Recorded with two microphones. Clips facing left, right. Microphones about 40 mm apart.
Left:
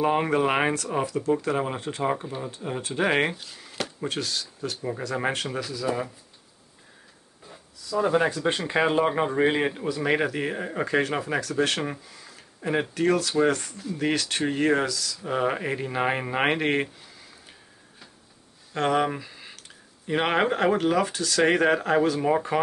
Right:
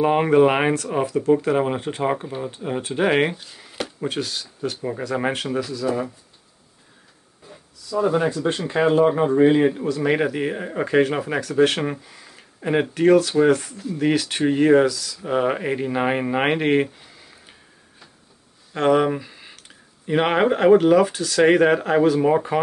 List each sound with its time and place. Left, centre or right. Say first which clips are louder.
0.0 s speech: right 7 dB; centre
7.9 s speech: right 3 dB; centre
8.5 s speech: right 7 dB; centre
13.5 s speech: right 7 dB; centre
18.7 s a sound: right 6 dB; centre
20.1 s speech: right 5 dB; centre